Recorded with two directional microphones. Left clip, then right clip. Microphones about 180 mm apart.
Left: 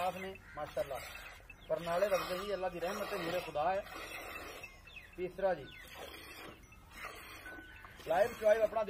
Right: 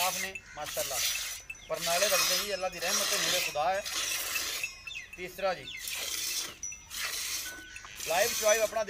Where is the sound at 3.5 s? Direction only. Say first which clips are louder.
Even; 15° left (ahead or behind).